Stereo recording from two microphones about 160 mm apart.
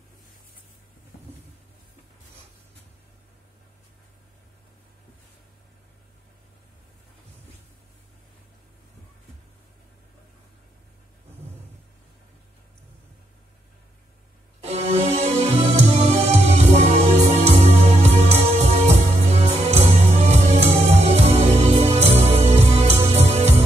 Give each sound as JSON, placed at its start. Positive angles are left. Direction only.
{"t": 14.6, "sound": "music", "side_deg": -40}